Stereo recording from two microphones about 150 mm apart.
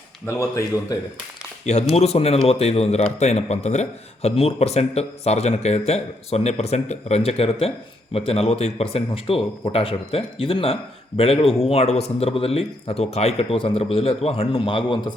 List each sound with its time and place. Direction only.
0.3 s speech: 20° left (ahead or behind)
1.7 s a man's voice: 50° left (ahead or behind); by 15.1 s 35° left (ahead or behind)